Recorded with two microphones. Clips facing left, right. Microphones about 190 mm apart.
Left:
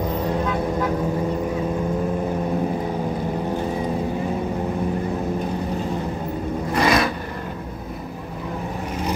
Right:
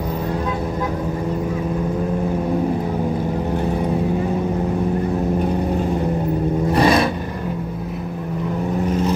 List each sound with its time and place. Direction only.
6.7 s vehicle: 30° right (ahead or behind)